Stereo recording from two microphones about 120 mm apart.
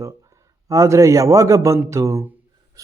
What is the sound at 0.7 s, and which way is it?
A man's voice, 25° right (ahead or behind).